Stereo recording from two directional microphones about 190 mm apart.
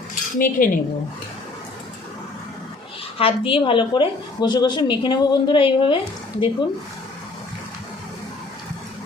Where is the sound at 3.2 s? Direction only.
30° left (ahead or behind).